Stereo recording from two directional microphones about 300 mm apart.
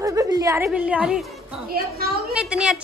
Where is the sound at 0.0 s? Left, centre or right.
Centre.